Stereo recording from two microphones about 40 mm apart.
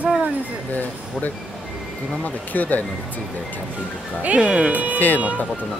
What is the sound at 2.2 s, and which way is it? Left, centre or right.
Speech, left.